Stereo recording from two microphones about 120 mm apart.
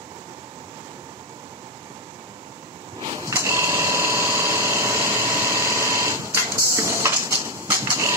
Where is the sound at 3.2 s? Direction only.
25° right (ahead or behind).